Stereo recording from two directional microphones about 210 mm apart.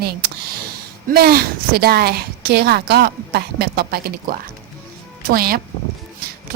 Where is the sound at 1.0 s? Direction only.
45° right (ahead or behind).